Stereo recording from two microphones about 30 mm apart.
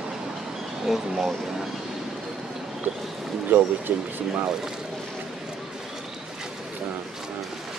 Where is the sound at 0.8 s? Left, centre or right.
Centre.